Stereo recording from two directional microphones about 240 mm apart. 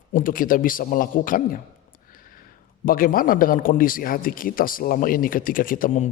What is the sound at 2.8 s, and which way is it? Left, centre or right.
Speech, left.